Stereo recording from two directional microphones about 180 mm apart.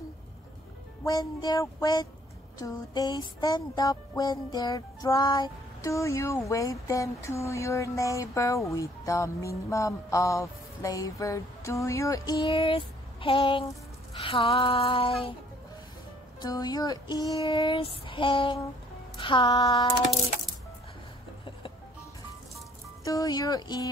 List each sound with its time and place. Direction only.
1.0 s music: 20° left (ahead or behind)
16.3 s music: 20° left (ahead or behind)
23.0 s music: 20° left (ahead or behind)